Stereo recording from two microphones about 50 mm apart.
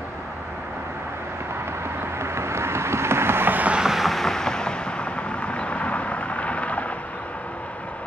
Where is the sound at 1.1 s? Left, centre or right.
Right.